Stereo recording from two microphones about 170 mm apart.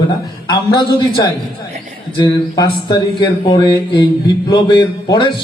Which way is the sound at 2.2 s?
25° left (ahead or behind).